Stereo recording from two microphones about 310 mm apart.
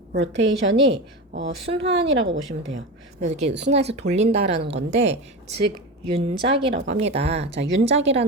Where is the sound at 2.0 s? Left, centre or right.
Right.